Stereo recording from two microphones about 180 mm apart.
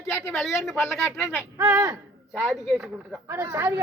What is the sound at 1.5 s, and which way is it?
Speech, 20° right (ahead or behind).